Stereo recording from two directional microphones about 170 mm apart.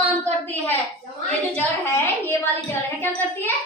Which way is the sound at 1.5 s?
10° left (ahead or behind).